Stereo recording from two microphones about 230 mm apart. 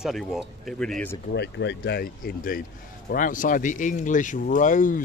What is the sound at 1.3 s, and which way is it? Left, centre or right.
Speech, left.